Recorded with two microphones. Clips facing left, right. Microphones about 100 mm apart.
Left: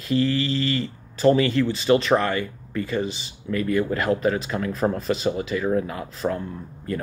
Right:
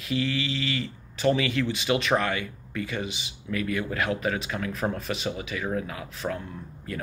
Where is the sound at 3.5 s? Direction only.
15° left (ahead or behind).